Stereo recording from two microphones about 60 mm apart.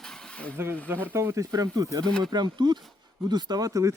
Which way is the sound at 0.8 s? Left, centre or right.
Right.